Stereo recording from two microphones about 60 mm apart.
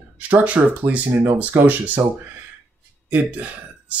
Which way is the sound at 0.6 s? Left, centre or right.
Right.